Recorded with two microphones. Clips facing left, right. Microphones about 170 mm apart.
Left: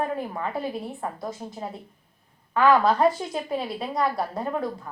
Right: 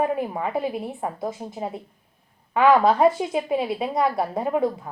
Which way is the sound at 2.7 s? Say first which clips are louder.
Right 3 dB; 25° right (ahead or behind).